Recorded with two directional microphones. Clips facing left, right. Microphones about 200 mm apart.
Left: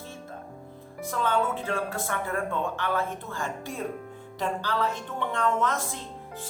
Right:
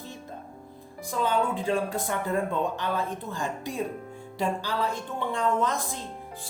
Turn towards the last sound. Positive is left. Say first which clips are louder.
# even
turn(degrees=-15)  # may be behind; listen again after turning